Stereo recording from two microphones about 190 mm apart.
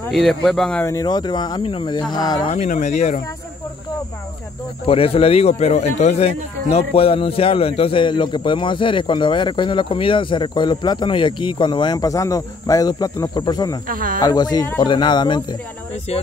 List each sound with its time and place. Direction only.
0.1 s speech: centre (ahead or behind)
0.8 s a man's voice: 20° left (ahead or behind)
2.5 s speech: 40° left (ahead or behind)
4.8 s a man's voice: 30° left (ahead or behind)
13.8 s speech: 45° right (ahead or behind)
14.2 s a man's voice: 20° left (ahead or behind)